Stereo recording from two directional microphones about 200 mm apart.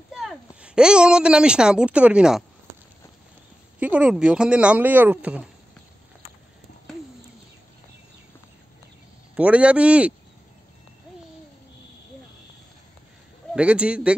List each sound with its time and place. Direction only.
0.1 s a woman's voice: 5° right (ahead or behind)
3.8 s speech: 5° right (ahead or behind)
9.3 s speech: 5° right (ahead or behind)
13.5 s speech: 5° right (ahead or behind)